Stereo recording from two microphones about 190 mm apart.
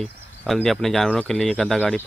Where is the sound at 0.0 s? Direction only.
5° left (ahead or behind).